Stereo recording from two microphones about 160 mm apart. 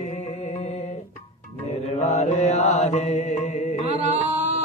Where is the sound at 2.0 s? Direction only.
45° left (ahead or behind).